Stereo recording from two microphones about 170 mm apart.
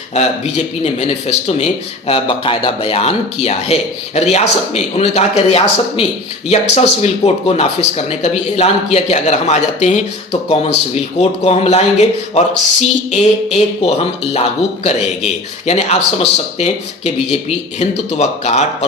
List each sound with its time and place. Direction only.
0.1 s speech: 40° left (ahead or behind)
17.7 s speech: 40° left (ahead or behind)